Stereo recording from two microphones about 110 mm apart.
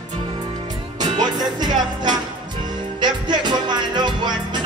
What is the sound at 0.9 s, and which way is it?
Music, 40° right (ahead or behind).